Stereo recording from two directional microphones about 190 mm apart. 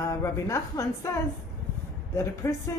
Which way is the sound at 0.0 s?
15° left (ahead or behind).